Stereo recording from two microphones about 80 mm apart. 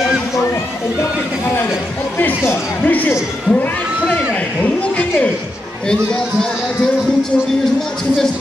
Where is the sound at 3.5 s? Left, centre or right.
Centre.